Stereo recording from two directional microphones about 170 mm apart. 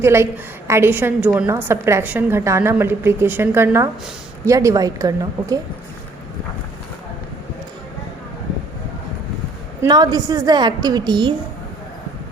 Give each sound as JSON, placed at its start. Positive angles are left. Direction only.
{"t": 0.0, "sound": "a woman's voice", "side_deg": -15}
{"t": 9.8, "sound": "a woman's voice", "side_deg": -25}